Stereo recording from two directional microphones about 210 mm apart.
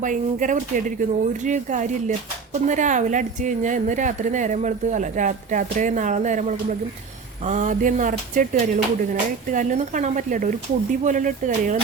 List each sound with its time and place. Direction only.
0.0 s speech: 40° right (ahead or behind)